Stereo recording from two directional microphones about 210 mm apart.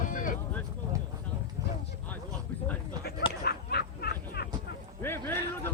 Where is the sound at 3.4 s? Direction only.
50° left (ahead or behind).